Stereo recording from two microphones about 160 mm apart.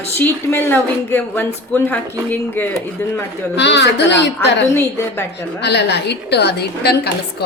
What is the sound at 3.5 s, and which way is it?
A woman's voice, 90° left.